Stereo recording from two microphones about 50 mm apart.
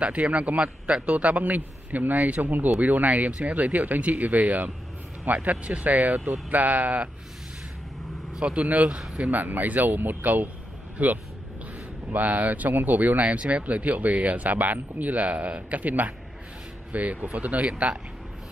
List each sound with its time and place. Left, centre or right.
0.0 s speech: right
8.4 s speech: right